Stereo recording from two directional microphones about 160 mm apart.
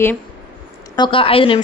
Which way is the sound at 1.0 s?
35° left (ahead or behind).